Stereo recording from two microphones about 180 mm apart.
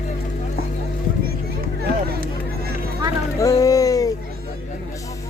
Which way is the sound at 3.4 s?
20° left (ahead or behind).